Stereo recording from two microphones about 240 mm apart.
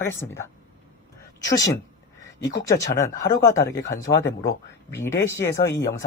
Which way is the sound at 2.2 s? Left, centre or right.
Centre.